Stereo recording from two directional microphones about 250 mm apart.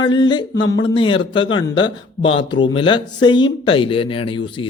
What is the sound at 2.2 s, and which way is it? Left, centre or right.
Speech, centre.